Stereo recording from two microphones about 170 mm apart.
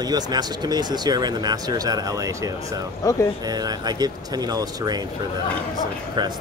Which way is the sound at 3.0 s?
20° left (ahead or behind).